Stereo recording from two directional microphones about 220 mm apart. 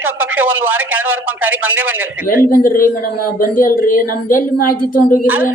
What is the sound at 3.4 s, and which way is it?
A woman's voice, 40° left (ahead or behind).